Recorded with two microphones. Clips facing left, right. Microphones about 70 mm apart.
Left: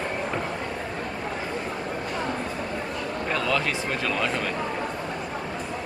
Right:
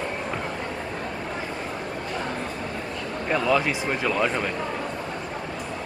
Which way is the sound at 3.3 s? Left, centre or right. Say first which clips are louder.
Right 4 dB; centre.